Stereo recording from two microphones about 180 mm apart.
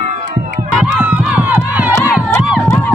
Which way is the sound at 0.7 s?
Centre (ahead or behind).